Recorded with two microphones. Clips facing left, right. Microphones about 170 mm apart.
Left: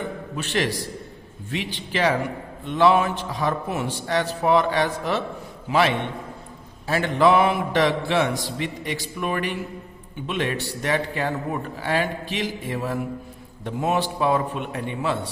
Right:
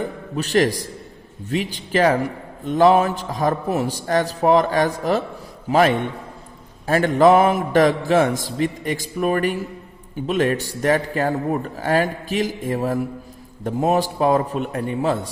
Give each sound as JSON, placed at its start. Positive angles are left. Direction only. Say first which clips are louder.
{"t": 0.3, "sound": "a man's voice", "louder": "right 7 dB", "side_deg": -40}